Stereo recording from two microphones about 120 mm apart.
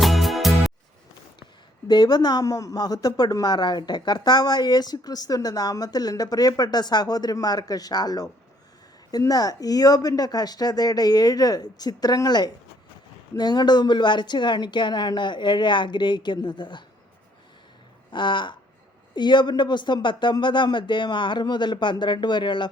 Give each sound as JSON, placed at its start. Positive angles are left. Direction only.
{"t": 0.0, "sound": "music", "side_deg": 0}
{"t": 1.9, "sound": "speech", "side_deg": 35}
{"t": 18.1, "sound": "speech", "side_deg": 40}